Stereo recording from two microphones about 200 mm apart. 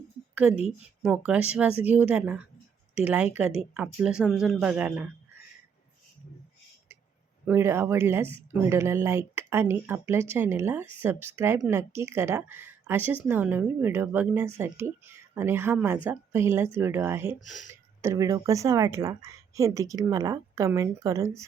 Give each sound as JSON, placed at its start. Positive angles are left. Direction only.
{"t": 1.0, "sound": "speech", "side_deg": -5}
{"t": 7.4, "sound": "speech", "side_deg": -10}
{"t": 17.4, "sound": "speech", "side_deg": 0}
{"t": 18.0, "sound": "speech", "side_deg": -15}